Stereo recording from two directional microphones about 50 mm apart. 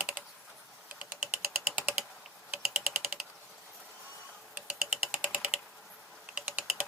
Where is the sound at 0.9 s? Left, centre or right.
Right.